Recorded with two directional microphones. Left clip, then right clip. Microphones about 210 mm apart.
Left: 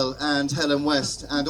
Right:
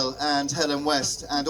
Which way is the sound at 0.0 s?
20° right (ahead or behind).